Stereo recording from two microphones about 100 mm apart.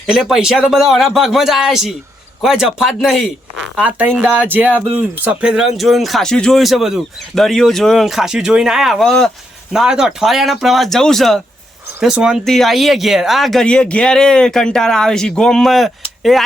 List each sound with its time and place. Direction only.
0.1 s speech: 5° right (ahead or behind)
3.8 s speech: 15° right (ahead or behind); by 9.3 s 5° left (ahead or behind)
9.7 s speech: 5° right (ahead or behind)
11.9 s speech: 10° right (ahead or behind)